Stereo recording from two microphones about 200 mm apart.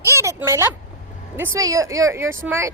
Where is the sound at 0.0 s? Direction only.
15° right (ahead or behind).